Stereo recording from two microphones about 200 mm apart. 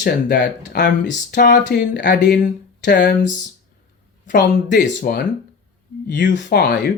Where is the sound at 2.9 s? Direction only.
60° left (ahead or behind).